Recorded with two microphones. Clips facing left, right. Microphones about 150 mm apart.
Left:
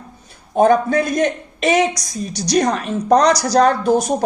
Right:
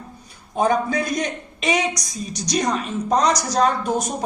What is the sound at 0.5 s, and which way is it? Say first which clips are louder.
A man's voice: left 6 dB; 55° left (ahead or behind).